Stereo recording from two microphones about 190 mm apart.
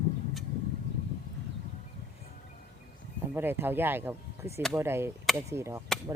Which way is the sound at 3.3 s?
10° right (ahead or behind).